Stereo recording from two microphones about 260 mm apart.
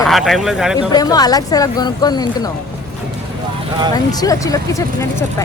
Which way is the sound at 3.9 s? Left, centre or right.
Centre.